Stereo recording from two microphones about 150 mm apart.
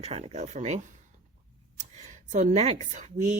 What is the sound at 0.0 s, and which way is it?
Speech, 45° right (ahead or behind).